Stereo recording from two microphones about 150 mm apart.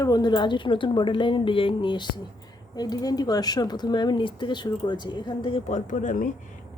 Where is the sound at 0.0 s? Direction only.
25° left (ahead or behind).